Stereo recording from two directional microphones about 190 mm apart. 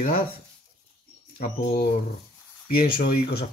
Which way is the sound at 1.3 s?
50° left (ahead or behind).